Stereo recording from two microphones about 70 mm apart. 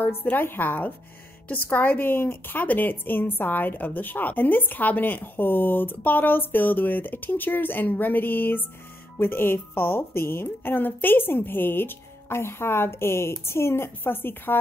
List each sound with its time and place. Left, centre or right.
0.0 s a woman's voice: left